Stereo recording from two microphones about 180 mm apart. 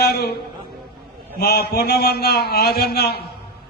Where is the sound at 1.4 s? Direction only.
60° left (ahead or behind).